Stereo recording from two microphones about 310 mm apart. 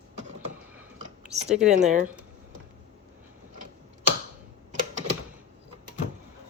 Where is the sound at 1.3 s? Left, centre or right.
Right.